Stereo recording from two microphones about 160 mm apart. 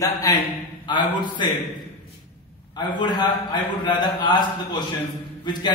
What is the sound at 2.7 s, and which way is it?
A man's voice, 30° left (ahead or behind).